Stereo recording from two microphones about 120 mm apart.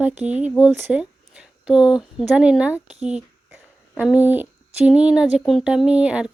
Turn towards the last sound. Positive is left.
turn(degrees=-10)  # may be behind; listen again after turning